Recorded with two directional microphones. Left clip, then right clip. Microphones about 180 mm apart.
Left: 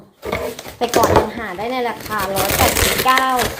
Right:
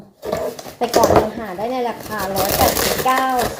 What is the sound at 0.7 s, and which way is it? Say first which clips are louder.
A child's voice: even; 20° left (ahead or behind).